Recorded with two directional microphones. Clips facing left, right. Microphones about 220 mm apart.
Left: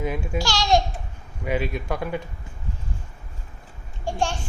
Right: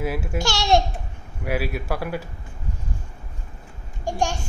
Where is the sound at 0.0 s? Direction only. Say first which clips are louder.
Even; 5° right (ahead or behind).